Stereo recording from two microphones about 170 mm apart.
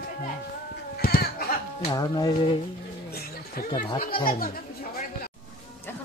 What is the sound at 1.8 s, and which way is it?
Speech, 25° left (ahead or behind).